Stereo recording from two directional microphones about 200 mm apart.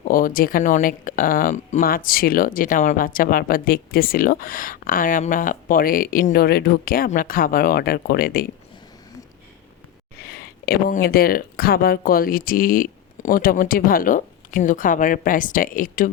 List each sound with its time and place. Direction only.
0.0 s speech: 45° left (ahead or behind)
10.2 s speech: 50° left (ahead or behind)